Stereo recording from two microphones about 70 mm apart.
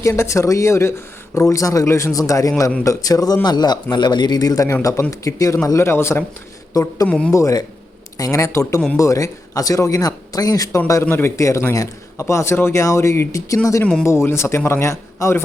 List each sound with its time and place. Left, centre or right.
0.0 s speech: left
3.4 s a man's voice: left
5.7 s a man's voice: left
6.8 s speech: left
11.1 s a man's voice: left